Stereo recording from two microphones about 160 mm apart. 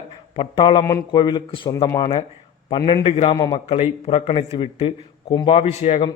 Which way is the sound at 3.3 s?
25° left (ahead or behind).